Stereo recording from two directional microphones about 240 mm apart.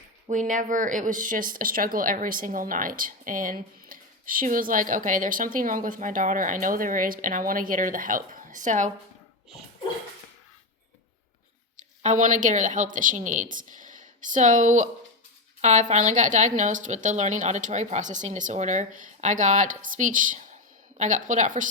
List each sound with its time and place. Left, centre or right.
0.3 s speech: right
11.8 s speech: right